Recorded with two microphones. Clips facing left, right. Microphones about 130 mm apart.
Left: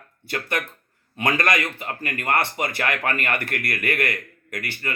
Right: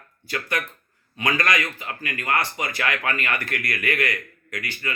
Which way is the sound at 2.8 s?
45° left (ahead or behind).